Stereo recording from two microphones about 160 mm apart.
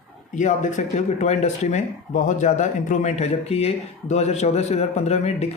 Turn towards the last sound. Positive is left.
turn(degrees=40)  # may be behind; listen again after turning